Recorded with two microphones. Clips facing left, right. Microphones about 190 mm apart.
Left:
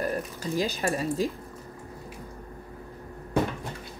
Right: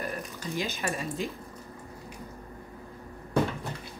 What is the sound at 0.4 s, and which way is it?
Speech, 35° left (ahead or behind).